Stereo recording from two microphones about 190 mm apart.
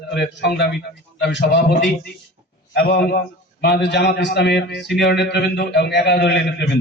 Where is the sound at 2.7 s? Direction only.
55° left (ahead or behind).